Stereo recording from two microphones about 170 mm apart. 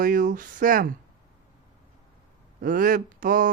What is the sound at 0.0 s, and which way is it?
Speech, 50° right (ahead or behind).